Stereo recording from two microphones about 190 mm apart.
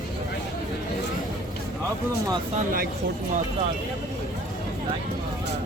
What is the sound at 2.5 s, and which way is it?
Speech, 45° right (ahead or behind).